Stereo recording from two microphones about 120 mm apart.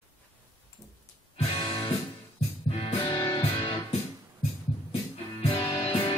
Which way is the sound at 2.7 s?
55° left (ahead or behind).